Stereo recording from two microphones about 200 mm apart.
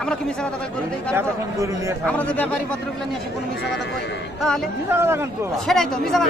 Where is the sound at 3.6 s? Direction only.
60° left (ahead or behind).